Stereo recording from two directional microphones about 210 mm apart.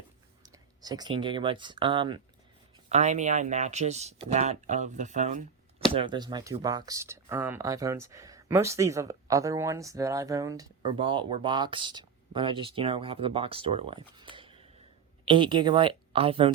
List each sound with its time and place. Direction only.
0.4 s speech: 20° right (ahead or behind)
2.9 s speech: 35° right (ahead or behind)
5.9 s speech: 25° right (ahead or behind)